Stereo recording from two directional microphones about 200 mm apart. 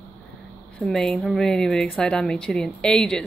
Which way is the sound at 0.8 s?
Centre (ahead or behind).